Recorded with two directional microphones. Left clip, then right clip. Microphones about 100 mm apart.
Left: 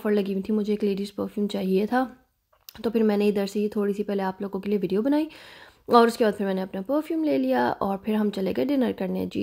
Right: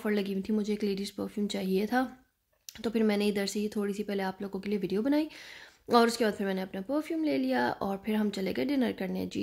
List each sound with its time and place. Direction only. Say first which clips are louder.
0.0 s a woman's voice: left 7 dB; 25° left (ahead or behind)